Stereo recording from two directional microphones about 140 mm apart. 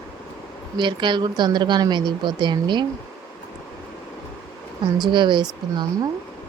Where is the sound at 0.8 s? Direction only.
35° right (ahead or behind).